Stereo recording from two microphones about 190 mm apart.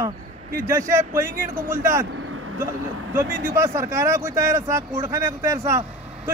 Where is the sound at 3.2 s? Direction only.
15° right (ahead or behind).